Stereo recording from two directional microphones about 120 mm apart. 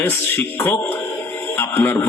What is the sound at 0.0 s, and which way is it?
A man's voice, 20° left (ahead or behind).